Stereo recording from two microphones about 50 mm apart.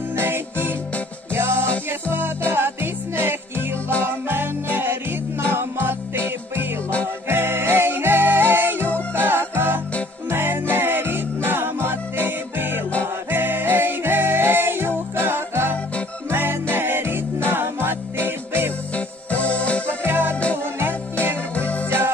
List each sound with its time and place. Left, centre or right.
0.2 s music: right
18.9 s music: left
20.1 s music: right
21.5 s music: left
21.8 s music: right